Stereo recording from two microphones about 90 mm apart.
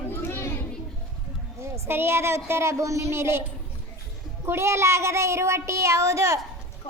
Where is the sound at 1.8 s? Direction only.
25° right (ahead or behind).